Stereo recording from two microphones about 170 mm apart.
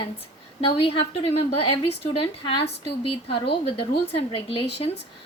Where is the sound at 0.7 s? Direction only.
35° left (ahead or behind).